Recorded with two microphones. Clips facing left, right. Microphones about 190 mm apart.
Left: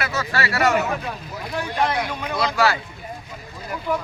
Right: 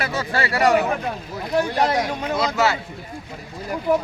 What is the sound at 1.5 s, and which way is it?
Speech, 40° right (ahead or behind).